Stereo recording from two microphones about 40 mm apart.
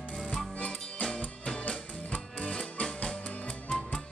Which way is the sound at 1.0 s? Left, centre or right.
Centre.